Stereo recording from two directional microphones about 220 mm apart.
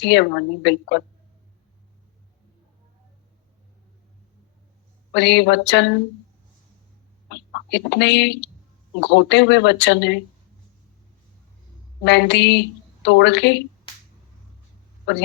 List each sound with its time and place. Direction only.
0.0 s a woman's voice: 50° left (ahead or behind)
5.1 s a woman's voice: 50° left (ahead or behind)
7.3 s a woman's voice: 50° left (ahead or behind)
12.0 s a woman's voice: 50° left (ahead or behind)